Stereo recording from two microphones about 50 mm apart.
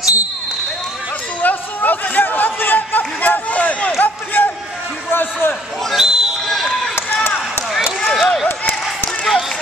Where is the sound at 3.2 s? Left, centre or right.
Left.